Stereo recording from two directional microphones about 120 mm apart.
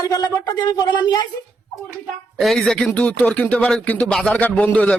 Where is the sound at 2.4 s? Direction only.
Centre (ahead or behind).